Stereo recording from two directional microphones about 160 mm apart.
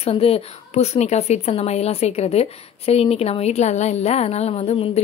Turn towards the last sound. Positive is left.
turn(degrees=40)  # may be behind; listen again after turning